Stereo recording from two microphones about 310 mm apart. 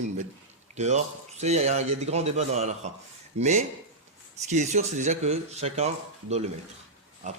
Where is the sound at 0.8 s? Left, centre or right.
Right.